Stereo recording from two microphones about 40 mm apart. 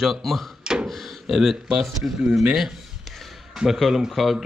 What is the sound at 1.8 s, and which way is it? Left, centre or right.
Speech, centre.